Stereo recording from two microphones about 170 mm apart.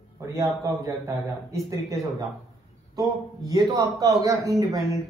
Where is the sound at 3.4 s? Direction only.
20° right (ahead or behind).